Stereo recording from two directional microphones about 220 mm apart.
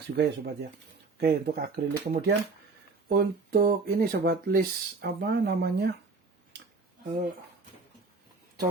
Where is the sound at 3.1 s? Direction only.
45° right (ahead or behind).